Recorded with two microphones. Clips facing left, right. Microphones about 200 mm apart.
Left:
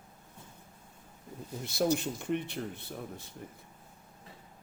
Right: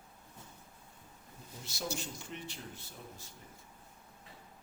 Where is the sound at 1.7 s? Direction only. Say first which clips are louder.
Left 11 dB; 60° left (ahead or behind).